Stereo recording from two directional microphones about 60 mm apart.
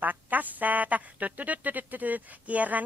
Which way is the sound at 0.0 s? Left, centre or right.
Right.